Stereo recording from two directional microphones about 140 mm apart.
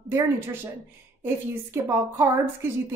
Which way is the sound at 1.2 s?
15° right (ahead or behind).